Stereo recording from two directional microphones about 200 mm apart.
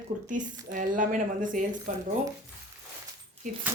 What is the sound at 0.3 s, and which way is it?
Speech, 40° right (ahead or behind).